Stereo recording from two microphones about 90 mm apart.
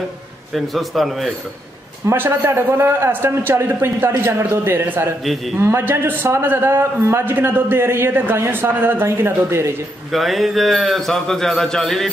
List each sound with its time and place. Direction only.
0.5 s a man's voice: centre (ahead or behind)
2.0 s a man's voice: 25° right (ahead or behind)
10.1 s a man's voice: centre (ahead or behind)